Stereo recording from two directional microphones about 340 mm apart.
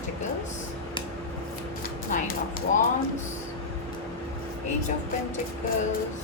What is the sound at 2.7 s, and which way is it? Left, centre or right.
Speech, left.